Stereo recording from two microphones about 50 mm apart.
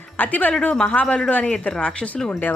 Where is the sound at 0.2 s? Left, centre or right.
Left.